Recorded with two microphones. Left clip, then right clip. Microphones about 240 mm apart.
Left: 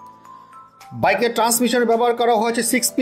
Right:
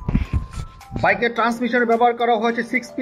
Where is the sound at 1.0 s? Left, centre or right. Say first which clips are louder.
Left 1 dB; left.